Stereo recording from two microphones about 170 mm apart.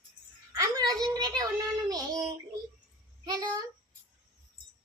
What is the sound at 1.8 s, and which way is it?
Child singing, 20° right (ahead or behind).